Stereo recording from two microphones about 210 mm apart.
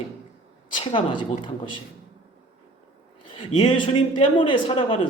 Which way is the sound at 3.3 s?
25° left (ahead or behind).